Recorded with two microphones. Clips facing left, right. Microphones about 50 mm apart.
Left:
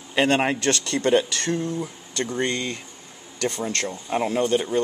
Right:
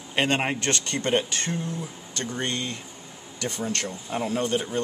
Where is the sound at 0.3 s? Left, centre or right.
Left.